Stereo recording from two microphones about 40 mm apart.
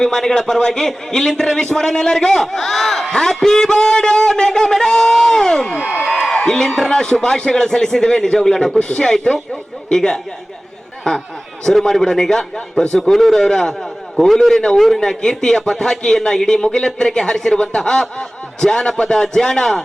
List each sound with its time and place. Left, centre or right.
0.0 s a man's voice: centre
6.9 s a man's voice: centre
15.2 s a man's voice: centre